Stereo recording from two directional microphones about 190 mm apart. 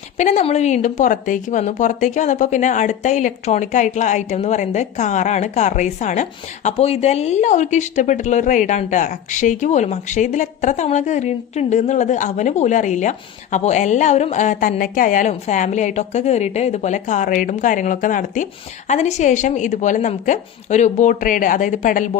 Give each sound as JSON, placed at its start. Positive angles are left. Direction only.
{"t": 0.2, "sound": "a woman's voice", "side_deg": 40}